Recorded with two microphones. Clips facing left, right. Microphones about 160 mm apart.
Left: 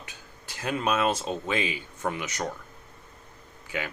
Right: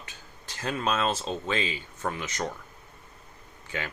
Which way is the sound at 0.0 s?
15° left (ahead or behind).